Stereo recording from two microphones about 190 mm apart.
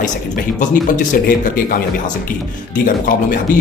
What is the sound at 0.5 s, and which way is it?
Speech, 45° left (ahead or behind).